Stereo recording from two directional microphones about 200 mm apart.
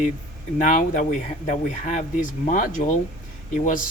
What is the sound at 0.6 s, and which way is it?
Speech, 40° left (ahead or behind).